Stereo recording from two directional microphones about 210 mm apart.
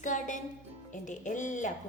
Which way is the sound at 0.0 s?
35° left (ahead or behind).